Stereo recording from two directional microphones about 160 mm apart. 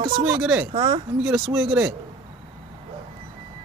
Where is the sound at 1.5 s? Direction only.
10° right (ahead or behind).